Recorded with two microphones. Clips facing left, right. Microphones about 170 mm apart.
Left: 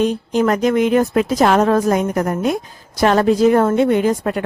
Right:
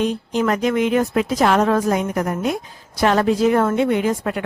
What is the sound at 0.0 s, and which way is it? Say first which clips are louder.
A woman's voice: left 3 dB; 40° left (ahead or behind).